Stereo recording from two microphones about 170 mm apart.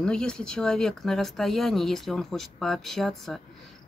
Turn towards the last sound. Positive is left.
turn(degrees=0)  # may be behind; listen again after turning